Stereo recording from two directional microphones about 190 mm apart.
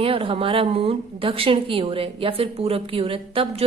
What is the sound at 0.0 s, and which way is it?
A woman's voice, 30° right (ahead or behind).